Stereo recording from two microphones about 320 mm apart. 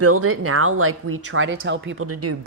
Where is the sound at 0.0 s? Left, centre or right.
Right.